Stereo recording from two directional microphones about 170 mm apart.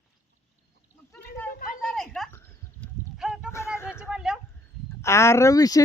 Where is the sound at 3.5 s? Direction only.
15° left (ahead or behind).